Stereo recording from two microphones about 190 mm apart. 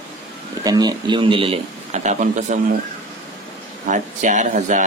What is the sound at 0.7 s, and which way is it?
A man's voice, 20° right (ahead or behind).